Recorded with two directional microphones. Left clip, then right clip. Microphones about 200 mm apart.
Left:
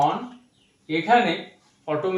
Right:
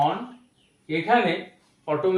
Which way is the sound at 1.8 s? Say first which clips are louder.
Right 2 dB; 20° right (ahead or behind).